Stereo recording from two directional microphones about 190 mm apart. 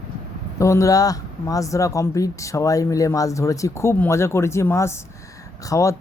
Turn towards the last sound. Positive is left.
turn(degrees=15)  # may be behind; listen again after turning